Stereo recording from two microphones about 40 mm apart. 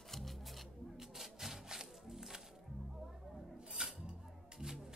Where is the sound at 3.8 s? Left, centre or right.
Centre.